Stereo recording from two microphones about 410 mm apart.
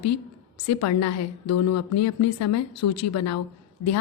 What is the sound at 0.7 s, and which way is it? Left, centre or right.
A woman's voice, left.